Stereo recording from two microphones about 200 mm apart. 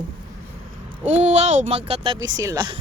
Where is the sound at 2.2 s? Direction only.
20° right (ahead or behind).